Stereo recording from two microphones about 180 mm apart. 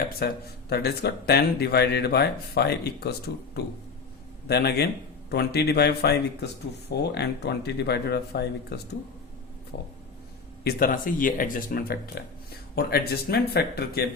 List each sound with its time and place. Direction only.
0.2 s speech: 60° left (ahead or behind)
9.7 s vehicle: 70° left (ahead or behind)
10.6 s speech: 60° left (ahead or behind)